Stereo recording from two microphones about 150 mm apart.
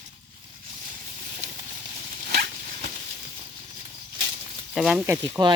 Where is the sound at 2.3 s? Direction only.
90° right.